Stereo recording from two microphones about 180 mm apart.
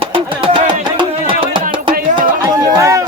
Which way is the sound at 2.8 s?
15° right (ahead or behind).